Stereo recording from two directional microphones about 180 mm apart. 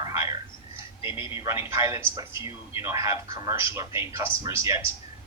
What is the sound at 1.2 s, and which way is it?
Speech, 30° left (ahead or behind).